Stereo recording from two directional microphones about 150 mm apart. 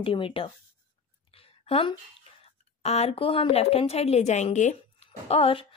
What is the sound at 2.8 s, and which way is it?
A woman's voice, 45° left (ahead or behind).